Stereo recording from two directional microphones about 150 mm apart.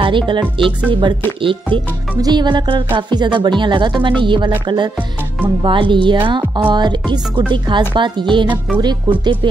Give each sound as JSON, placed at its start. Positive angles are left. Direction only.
{"t": 0.0, "sound": "speech", "side_deg": -35}